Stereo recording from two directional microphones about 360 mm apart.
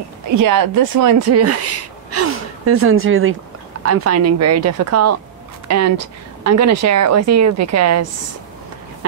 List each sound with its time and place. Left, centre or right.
0.4 s a woman's voice: right